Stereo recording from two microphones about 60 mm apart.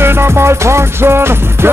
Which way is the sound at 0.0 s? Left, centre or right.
Right.